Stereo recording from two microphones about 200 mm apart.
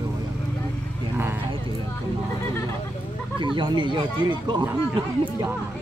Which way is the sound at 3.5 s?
25° right (ahead or behind).